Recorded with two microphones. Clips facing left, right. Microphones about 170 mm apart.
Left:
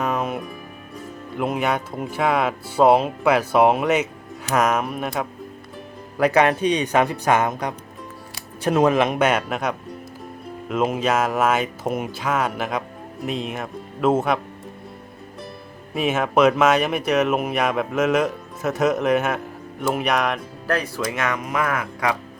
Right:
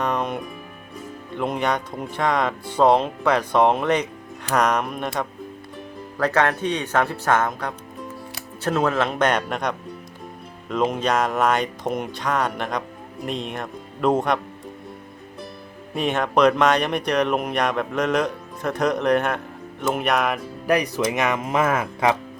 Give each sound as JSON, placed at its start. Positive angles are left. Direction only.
{"t": 0.0, "sound": "music", "side_deg": 5}
{"t": 1.4, "sound": "speech", "side_deg": 5}
{"t": 16.0, "sound": "speech", "side_deg": 5}
{"t": 20.7, "sound": "speech", "side_deg": -15}